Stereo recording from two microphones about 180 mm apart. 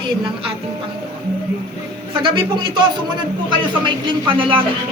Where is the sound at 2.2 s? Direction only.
25° right (ahead or behind).